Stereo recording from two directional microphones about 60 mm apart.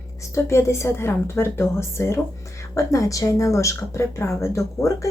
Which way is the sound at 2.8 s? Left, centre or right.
Left.